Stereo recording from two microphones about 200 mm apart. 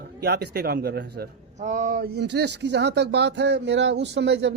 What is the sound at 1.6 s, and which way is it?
Speech, 40° right (ahead or behind).